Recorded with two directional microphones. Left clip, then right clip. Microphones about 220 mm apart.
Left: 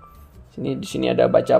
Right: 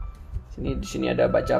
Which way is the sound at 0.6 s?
40° left (ahead or behind).